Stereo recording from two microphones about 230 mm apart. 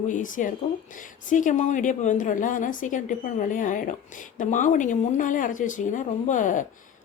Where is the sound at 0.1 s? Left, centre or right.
Left.